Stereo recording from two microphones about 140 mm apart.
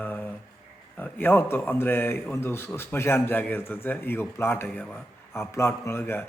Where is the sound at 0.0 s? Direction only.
15° left (ahead or behind).